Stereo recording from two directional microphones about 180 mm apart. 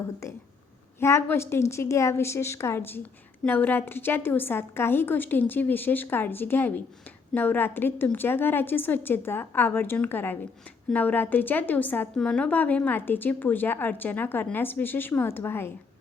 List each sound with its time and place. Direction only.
0.9 s a woman's voice: 15° left (ahead or behind)